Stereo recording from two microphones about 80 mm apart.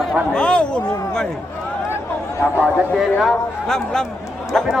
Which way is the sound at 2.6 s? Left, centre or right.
Centre.